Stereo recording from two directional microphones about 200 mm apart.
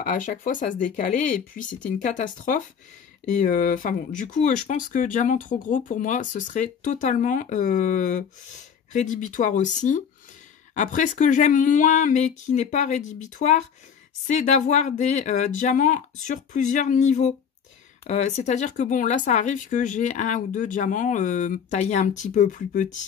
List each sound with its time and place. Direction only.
0.0 s speech: 40° left (ahead or behind)